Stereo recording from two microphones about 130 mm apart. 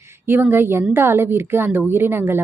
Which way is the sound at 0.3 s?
15° right (ahead or behind).